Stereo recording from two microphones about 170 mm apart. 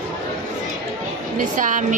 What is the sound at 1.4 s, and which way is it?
Speech, 50° right (ahead or behind).